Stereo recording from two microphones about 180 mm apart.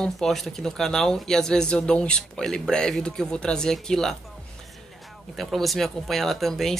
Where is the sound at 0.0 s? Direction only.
Centre (ahead or behind).